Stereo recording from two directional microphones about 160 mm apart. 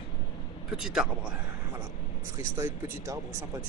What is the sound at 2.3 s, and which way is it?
Speech, 20° right (ahead or behind).